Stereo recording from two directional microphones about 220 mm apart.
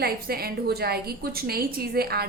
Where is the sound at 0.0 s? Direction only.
45° right (ahead or behind).